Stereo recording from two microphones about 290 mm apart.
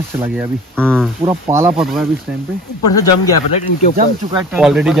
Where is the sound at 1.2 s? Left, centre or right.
Centre.